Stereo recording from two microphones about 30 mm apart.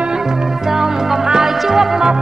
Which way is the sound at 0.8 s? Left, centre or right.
Right.